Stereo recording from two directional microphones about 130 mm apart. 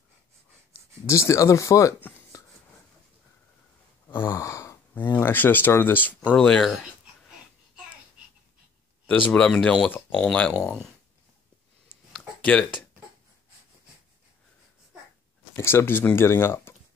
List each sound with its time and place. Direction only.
1.0 s speech: 20° left (ahead or behind)
4.1 s sigh: 20° left (ahead or behind)
6.3 s speech: 5° left (ahead or behind)
9.0 s speech: 10° left (ahead or behind)
12.4 s speech: 10° left (ahead or behind)
15.5 s speech: 20° left (ahead or behind)